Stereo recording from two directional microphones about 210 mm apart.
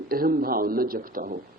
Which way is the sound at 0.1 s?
45° right (ahead or behind).